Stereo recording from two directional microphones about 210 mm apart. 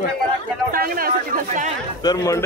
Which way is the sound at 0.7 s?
45° right (ahead or behind).